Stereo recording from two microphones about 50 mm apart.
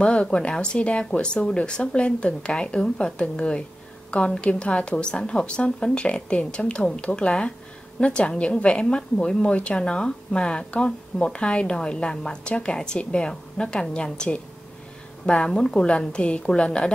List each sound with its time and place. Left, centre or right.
0.0 s a woman's voice: left